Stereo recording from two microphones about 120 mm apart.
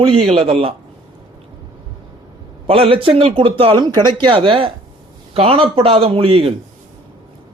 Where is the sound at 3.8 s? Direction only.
40° right (ahead or behind).